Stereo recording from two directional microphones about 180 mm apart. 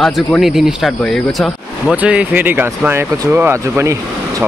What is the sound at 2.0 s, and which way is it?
Speech, 10° right (ahead or behind).